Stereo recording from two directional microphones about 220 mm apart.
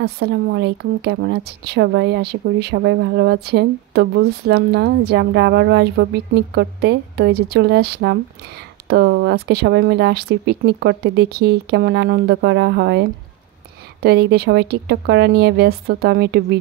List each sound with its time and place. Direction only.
0.0 s a woman's voice: 50° right (ahead or behind)